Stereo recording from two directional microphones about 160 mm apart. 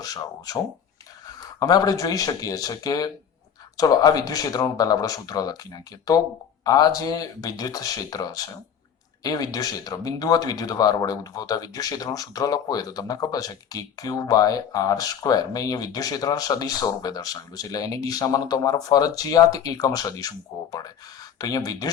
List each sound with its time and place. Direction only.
0.0 s speech: 20° left (ahead or behind)
6.7 s speech: 25° left (ahead or behind)